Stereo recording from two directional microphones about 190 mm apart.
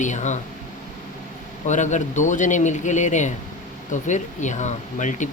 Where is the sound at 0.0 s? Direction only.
40° left (ahead or behind).